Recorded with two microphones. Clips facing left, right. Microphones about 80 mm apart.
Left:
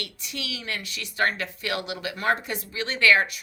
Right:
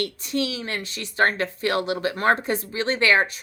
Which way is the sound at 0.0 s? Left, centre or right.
Right.